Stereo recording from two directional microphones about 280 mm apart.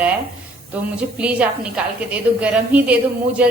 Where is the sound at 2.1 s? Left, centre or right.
Centre.